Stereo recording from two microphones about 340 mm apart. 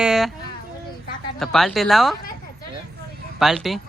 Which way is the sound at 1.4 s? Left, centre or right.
Centre.